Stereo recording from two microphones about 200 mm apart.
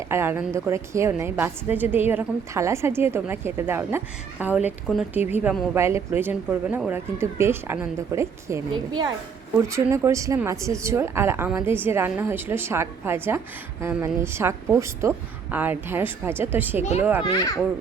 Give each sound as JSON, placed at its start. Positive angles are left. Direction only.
{"t": 0.1, "sound": "a woman's voice", "side_deg": -10}
{"t": 17.2, "sound": "a child's voice", "side_deg": 20}